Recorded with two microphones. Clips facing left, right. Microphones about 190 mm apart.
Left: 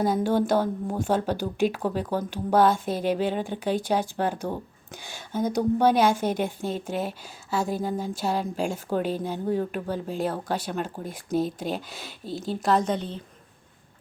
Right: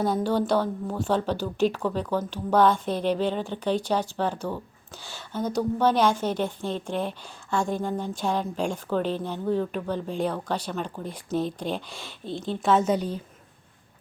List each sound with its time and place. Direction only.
0.0 s speech: 10° left (ahead or behind)
0.3 s a sound: 45° left (ahead or behind)
0.6 s a woman's voice: 10° left (ahead or behind); by 13.1 s 10° right (ahead or behind)